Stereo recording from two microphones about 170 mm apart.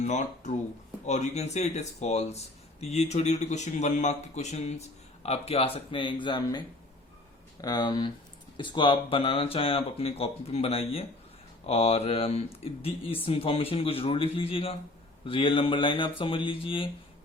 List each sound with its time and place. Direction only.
0.0 s speech: 45° left (ahead or behind); by 6.6 s 25° left (ahead or behind)
7.6 s speech: 25° left (ahead or behind)